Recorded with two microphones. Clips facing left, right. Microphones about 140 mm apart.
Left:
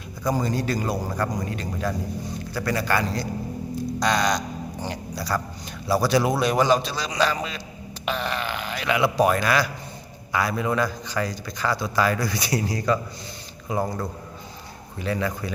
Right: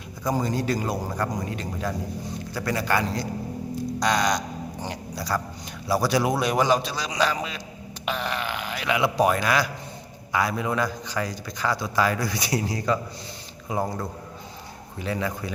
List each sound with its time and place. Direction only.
0.3 s a man's voice: 20° right (ahead or behind)